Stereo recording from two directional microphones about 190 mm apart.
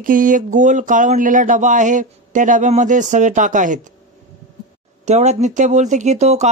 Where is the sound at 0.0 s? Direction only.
45° right (ahead or behind).